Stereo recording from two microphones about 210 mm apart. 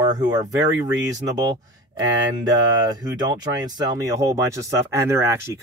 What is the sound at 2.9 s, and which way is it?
Speech, 20° right (ahead or behind).